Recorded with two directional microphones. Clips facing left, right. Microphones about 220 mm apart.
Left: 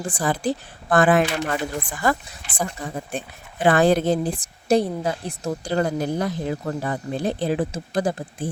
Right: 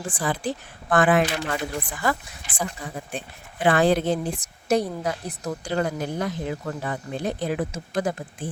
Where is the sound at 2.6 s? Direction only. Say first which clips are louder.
Left 3 dB; 45° left (ahead or behind).